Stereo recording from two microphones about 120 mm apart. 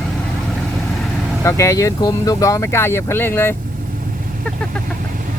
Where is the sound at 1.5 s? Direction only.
25° left (ahead or behind).